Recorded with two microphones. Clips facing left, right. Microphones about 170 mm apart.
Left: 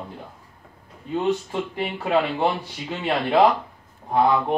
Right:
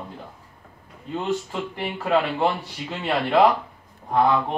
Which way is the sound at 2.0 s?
10° left (ahead or behind).